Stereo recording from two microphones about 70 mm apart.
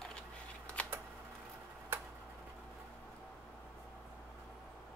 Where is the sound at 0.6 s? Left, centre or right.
Centre.